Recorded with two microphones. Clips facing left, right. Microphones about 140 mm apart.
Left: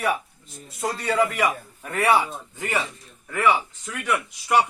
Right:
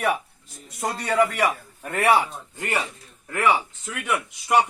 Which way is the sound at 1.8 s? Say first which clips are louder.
Right 1 dB; 5° right (ahead or behind).